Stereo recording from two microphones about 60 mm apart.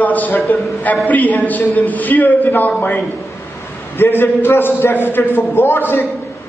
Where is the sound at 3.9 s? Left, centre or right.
Left.